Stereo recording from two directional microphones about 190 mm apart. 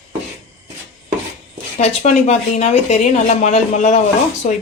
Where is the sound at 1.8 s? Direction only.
35° left (ahead or behind).